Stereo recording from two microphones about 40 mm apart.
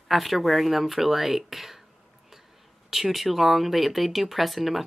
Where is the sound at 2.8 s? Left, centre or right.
Centre.